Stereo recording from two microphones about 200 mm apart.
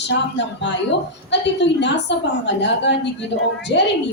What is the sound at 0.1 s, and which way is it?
A woman's voice, 60° left (ahead or behind).